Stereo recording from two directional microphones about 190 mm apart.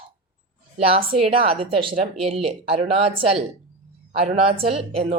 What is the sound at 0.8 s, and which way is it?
A woman's voice, 30° right (ahead or behind).